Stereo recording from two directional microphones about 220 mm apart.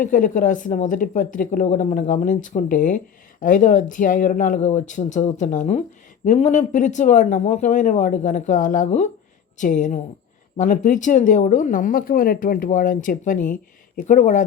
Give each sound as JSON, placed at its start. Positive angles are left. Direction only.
{"t": 0.0, "sound": "speech", "side_deg": 35}